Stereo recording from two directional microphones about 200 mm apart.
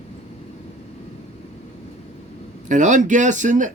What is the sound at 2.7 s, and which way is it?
Speech, 40° right (ahead or behind).